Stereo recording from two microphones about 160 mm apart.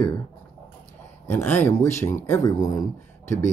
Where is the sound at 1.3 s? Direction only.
10° left (ahead or behind).